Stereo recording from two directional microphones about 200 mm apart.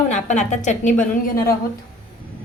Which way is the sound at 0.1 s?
40° left (ahead or behind).